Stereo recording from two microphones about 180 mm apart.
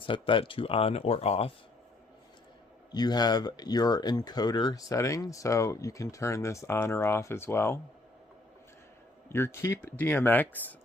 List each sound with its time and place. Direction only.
0.0 s speech: 30° left (ahead or behind)
2.9 s speech: 20° left (ahead or behind)
9.3 s speech: 15° left (ahead or behind)